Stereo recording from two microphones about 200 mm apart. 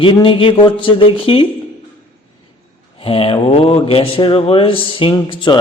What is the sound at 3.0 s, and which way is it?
Speech, 30° left (ahead or behind).